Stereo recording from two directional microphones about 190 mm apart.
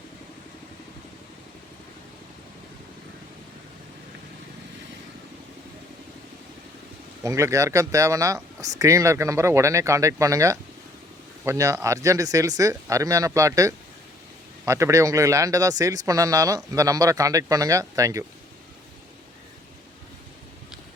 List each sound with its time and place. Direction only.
7.2 s speech: 15° right (ahead or behind)